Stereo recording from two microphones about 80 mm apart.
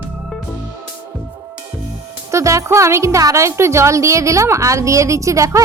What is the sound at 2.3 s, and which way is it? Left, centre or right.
Speech, right.